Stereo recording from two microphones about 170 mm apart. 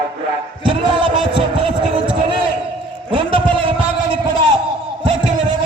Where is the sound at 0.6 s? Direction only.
30° right (ahead or behind).